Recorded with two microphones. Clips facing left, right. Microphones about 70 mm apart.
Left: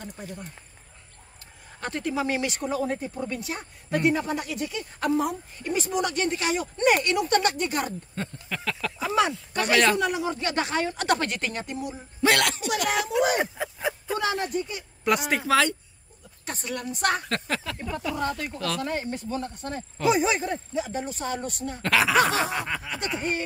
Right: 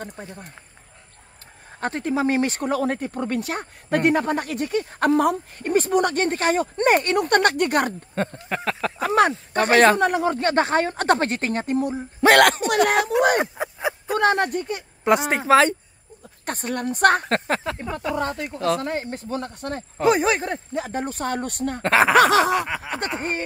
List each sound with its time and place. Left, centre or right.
0.1 s speech: right
1.8 s speech: right
2.6 s speech: right
9.0 s speech: right
13.6 s a sound: centre
14.1 s speech: right
15.0 s speech: right
16.4 s speech: right
19.3 s speech: right
21.8 s speech: right
22.1 s a sound: right
22.8 s speech: right